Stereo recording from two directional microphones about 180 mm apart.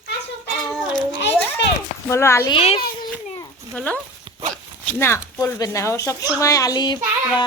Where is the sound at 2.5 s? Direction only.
30° left (ahead or behind).